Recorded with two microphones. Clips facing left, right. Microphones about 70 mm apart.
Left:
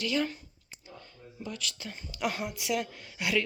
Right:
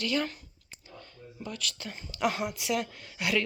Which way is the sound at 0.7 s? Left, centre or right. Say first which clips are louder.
Even; centre.